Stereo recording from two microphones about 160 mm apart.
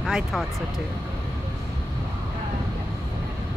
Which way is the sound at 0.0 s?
Centre (ahead or behind).